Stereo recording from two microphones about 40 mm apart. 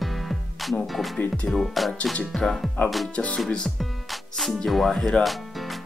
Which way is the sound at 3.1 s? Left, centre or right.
Left.